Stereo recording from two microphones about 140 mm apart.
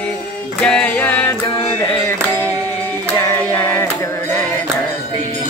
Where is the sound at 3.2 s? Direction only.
15° left (ahead or behind).